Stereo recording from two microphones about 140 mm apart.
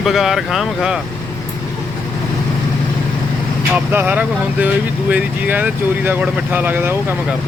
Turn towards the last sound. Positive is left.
turn(degrees=-15)  # may be behind; listen again after turning